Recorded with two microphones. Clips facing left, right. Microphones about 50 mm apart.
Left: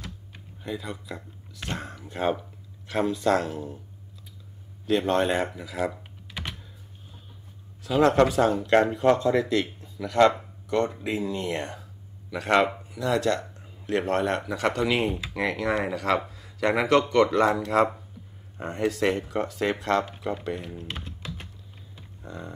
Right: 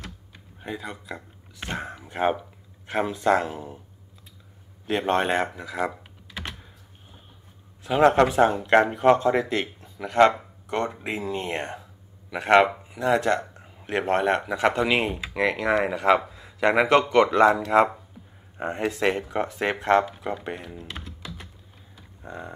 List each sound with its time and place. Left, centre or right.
0.6 s speech: right
4.8 s speech: right
7.8 s speech: right
15.6 s speech: right
20.6 s speech: centre
22.2 s speech: right